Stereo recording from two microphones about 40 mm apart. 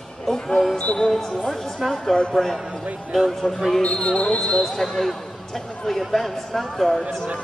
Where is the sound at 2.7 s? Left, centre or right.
Right.